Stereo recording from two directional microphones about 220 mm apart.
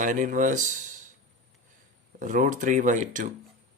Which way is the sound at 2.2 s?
35° right (ahead or behind).